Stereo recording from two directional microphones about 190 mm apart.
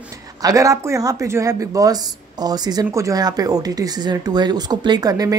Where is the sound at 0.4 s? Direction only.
15° right (ahead or behind).